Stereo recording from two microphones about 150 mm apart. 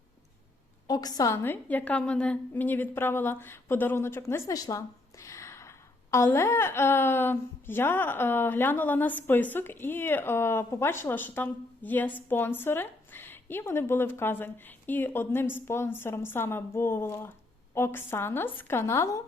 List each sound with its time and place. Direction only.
0.9 s a woman's voice: 25° left (ahead or behind)